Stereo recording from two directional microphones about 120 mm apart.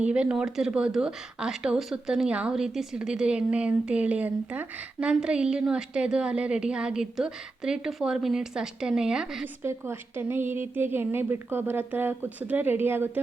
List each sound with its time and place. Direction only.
0.0 s speech: 10° right (ahead or behind)
9.6 s speech: 20° right (ahead or behind)